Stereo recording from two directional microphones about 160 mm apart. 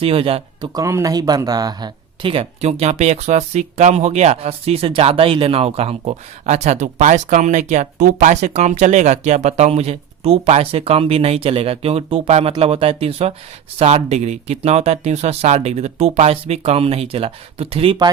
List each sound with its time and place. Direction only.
0.0 s speech: 35° right (ahead or behind)
0.7 s speech: 20° right (ahead or behind); by 18.1 s 35° right (ahead or behind)